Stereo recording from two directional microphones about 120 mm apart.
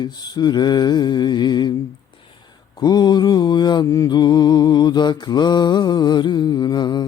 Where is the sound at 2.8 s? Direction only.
35° left (ahead or behind).